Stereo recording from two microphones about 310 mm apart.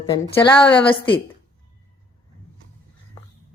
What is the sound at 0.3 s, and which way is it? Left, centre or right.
Speech, centre.